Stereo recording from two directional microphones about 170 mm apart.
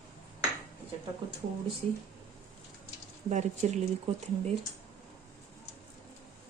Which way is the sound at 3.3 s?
45° right (ahead or behind).